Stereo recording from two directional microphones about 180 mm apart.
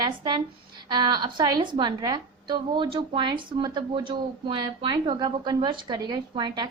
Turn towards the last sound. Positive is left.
turn(degrees=-25)  # may be behind; listen again after turning